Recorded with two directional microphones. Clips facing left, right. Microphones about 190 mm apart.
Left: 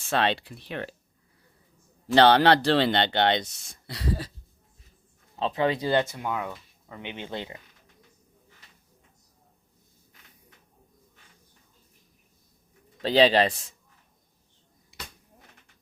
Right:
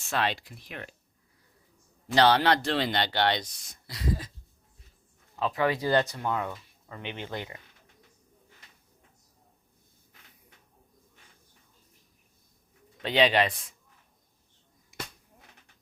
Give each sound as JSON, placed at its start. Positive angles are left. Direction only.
{"t": 0.1, "sound": "speech", "side_deg": 30}
{"t": 2.1, "sound": "a man's voice", "side_deg": 30}
{"t": 5.4, "sound": "speech", "side_deg": 25}
{"t": 13.0, "sound": "a man's voice", "side_deg": 35}